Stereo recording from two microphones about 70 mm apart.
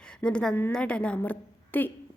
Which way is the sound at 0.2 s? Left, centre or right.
Centre.